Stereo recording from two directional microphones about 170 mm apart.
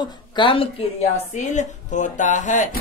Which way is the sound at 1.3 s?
45° left (ahead or behind).